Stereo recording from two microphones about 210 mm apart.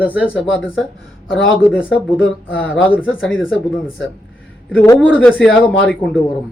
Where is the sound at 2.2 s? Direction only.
5° left (ahead or behind).